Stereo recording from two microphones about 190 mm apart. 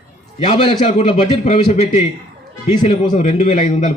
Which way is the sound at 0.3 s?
30° left (ahead or behind).